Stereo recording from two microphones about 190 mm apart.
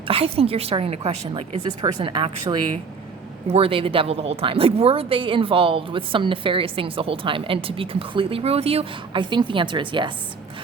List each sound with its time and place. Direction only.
0.1 s a woman's voice: 30° right (ahead or behind)